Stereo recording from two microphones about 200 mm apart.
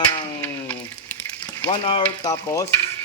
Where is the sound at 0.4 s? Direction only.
10° left (ahead or behind).